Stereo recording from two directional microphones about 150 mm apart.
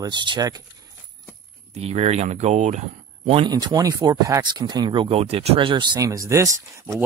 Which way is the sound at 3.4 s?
25° right (ahead or behind).